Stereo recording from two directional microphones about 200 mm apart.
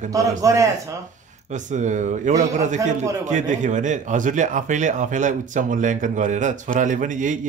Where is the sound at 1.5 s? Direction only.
35° right (ahead or behind).